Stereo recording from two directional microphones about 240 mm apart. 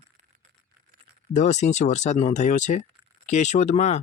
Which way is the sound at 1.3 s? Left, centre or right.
Left.